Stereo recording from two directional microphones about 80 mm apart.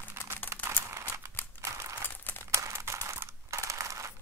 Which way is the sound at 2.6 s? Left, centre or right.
Right.